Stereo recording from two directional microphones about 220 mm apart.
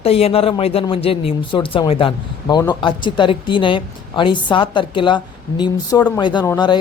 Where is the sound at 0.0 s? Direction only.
25° left (ahead or behind).